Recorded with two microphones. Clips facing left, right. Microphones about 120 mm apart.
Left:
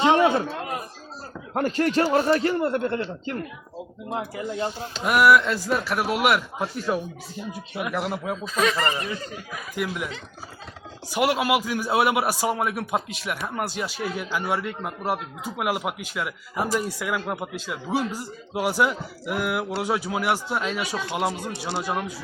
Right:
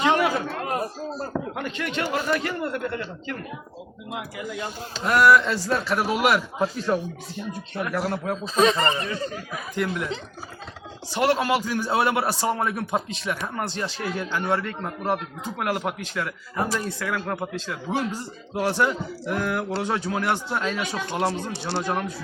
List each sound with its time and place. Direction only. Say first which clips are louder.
0.0 s a man's voice: left 3 dB; 25° left (ahead or behind)
1.5 s speech: left 7 dB; 40° left (ahead or behind)
5.0 s a man's voice: even; 10° left (ahead or behind)
8.4 s speech: right 4 dB; 30° right (ahead or behind)
9.7 s a man's voice: right 2 dB; 5° left (ahead or behind)
11.1 s a man's voice: even; 10° left (ahead or behind)